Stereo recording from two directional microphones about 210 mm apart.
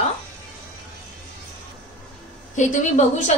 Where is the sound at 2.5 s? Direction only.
35° left (ahead or behind).